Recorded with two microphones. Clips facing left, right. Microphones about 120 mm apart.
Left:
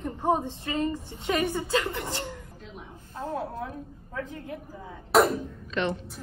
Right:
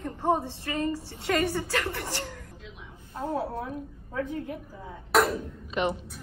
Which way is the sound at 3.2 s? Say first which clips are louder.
Right 2 dB; 10° right (ahead or behind).